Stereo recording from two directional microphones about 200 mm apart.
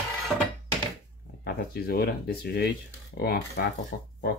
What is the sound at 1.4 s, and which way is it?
Speech, 55° left (ahead or behind).